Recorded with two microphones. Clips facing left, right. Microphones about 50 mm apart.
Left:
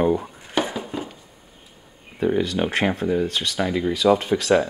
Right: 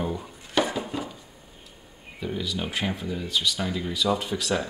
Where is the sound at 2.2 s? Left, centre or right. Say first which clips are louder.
Left 9 dB; left.